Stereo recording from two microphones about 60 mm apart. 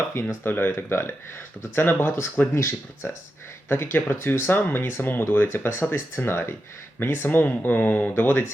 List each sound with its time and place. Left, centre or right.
0.4 s speech: left
2.6 s speech: left